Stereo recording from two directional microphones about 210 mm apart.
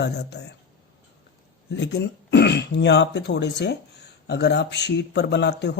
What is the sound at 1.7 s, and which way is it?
A man's voice, 50° left (ahead or behind).